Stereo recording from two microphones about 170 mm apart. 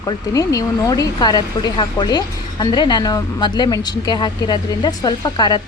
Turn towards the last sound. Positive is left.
turn(degrees=25)  # may be behind; listen again after turning